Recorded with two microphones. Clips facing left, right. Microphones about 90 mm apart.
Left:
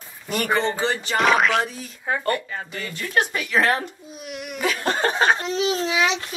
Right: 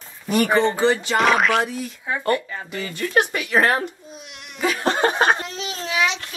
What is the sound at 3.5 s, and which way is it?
Speech, 50° right (ahead or behind).